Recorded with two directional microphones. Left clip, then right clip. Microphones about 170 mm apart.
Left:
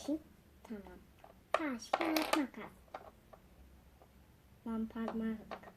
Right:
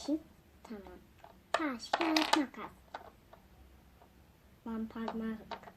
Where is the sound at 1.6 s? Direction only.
15° left (ahead or behind).